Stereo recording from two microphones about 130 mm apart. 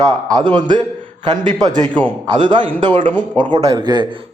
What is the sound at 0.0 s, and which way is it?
A man's voice, 30° right (ahead or behind).